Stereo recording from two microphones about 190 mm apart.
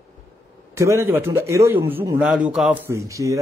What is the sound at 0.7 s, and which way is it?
A man's voice, 15° right (ahead or behind).